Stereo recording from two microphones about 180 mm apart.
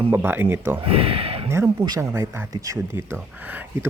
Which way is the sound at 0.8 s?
30° right (ahead or behind).